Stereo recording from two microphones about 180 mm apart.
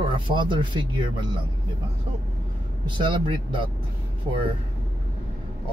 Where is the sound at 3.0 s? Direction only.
25° right (ahead or behind).